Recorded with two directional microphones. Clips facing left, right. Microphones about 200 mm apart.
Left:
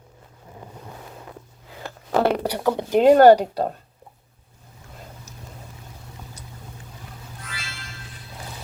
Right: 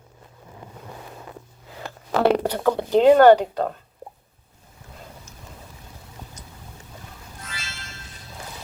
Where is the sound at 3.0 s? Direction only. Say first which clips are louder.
Left 1 dB; 40° left (ahead or behind).